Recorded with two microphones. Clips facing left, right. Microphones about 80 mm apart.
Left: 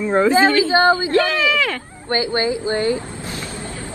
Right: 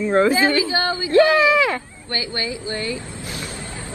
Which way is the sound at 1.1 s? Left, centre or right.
Right.